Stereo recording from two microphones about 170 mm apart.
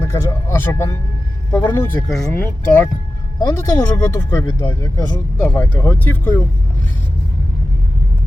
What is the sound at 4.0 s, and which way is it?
Speech, 15° left (ahead or behind).